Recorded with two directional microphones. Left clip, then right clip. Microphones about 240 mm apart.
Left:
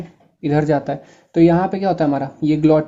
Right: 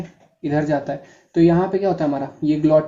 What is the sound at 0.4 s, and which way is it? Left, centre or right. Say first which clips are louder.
Speech: left 3 dB; left.